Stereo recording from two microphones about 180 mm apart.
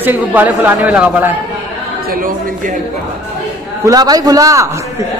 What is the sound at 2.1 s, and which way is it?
Speech, 50° right (ahead or behind).